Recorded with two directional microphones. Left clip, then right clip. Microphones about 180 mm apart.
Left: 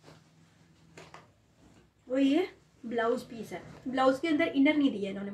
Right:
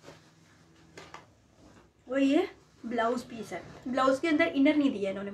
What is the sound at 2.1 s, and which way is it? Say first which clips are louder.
A woman's voice: right 1 dB; 20° right (ahead or behind).